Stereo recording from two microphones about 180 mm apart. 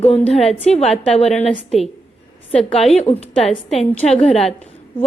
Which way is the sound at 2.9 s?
35° left (ahead or behind).